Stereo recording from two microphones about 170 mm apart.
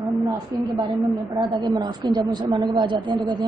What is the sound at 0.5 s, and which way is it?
Speech, 20° right (ahead or behind).